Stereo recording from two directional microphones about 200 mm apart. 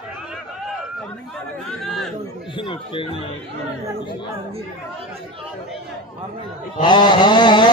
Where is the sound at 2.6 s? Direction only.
25° left (ahead or behind).